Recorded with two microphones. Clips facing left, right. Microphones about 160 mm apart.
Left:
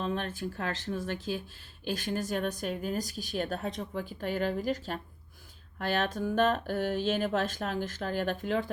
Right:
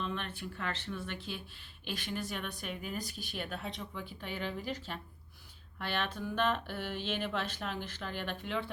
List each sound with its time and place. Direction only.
0.0 s speech: 40° left (ahead or behind)